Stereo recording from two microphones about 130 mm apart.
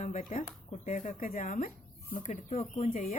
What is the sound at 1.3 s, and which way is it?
Speech, 90° left.